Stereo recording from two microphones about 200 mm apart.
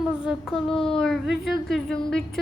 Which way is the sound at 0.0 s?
Centre (ahead or behind).